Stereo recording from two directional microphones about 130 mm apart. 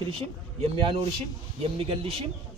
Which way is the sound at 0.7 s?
45° right (ahead or behind).